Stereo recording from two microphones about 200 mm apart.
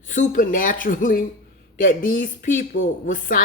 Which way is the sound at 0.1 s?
40° left (ahead or behind).